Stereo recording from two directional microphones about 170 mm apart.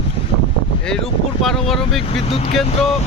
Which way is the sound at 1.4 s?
Centre (ahead or behind).